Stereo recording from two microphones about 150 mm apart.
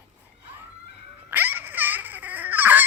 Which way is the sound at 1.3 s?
10° right (ahead or behind).